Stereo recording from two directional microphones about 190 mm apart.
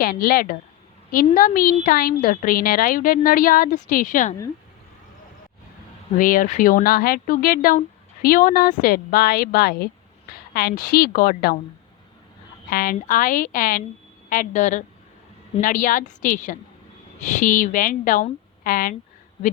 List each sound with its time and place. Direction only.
0.0 s speech: 50° left (ahead or behind)
6.1 s speech: 45° left (ahead or behind)
12.7 s a woman's voice: 50° left (ahead or behind)